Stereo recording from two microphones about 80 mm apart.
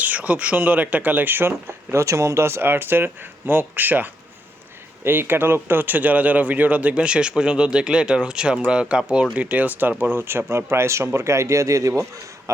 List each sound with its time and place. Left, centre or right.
0.0 s speech: centre; by 12.2 s right